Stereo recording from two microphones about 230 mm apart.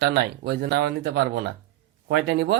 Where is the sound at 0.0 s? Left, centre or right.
Right.